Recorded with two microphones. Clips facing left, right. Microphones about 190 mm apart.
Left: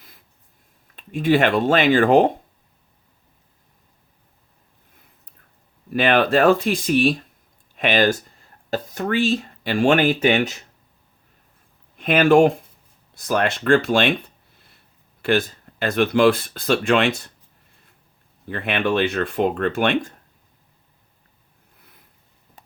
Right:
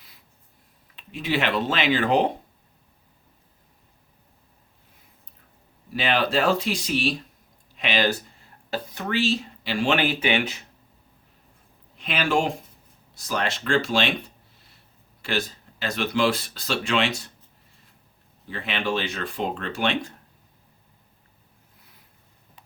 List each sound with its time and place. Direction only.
0.9 s speech: 50° left (ahead or behind)
5.9 s speech: 55° left (ahead or behind)
11.9 s speech: 50° left (ahead or behind)
18.4 s speech: 55° left (ahead or behind)
22.6 s a sound: 45° left (ahead or behind)